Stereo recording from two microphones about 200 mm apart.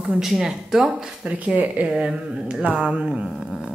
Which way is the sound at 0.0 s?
Centre (ahead or behind).